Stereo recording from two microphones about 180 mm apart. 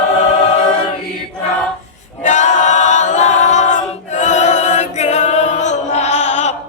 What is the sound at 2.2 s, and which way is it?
A capella, 40° left (ahead or behind).